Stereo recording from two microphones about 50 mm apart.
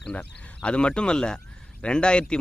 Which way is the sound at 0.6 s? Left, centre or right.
Left.